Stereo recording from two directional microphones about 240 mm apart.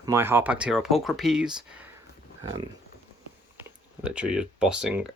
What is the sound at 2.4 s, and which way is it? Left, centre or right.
Speech, centre.